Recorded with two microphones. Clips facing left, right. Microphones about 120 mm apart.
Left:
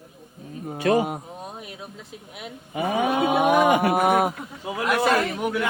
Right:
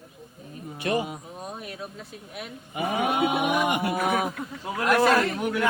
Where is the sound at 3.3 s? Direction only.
60° left (ahead or behind).